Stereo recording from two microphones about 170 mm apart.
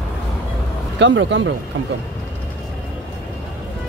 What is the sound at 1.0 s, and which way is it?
Speech, 90° right.